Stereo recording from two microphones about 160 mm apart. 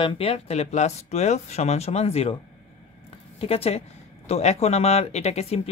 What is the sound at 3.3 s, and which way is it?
A woman's voice, 40° left (ahead or behind).